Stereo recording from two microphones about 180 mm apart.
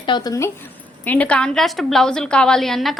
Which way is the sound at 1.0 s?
10° left (ahead or behind).